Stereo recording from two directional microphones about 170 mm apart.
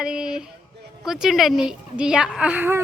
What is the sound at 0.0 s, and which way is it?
Speech, 5° right (ahead or behind).